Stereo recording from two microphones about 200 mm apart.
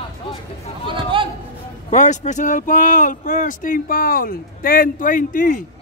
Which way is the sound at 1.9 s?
35° left (ahead or behind).